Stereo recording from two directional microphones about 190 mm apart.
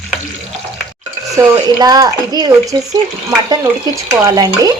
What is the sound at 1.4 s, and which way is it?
Dishes, 20° right (ahead or behind).